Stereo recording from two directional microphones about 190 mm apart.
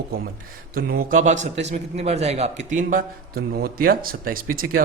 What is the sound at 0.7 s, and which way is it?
A man's voice, 50° right (ahead or behind).